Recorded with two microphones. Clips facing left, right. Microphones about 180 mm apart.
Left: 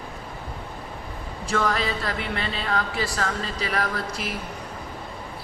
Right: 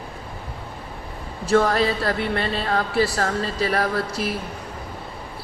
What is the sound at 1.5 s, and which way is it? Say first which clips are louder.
Speech: right 6 dB; 35° right (ahead or behind).